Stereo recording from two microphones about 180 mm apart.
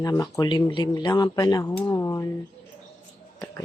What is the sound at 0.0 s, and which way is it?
Speech, 20° left (ahead or behind).